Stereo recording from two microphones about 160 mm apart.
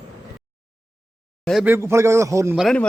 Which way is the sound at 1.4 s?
Centre (ahead or behind).